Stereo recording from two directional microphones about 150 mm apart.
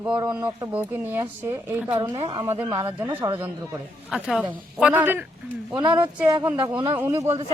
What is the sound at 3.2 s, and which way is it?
Speech, 35° right (ahead or behind).